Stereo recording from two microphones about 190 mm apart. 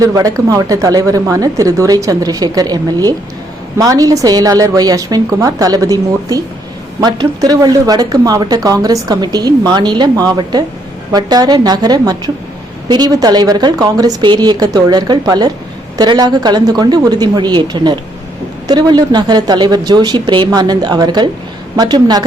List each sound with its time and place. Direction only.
0.0 s speech: 20° right (ahead or behind)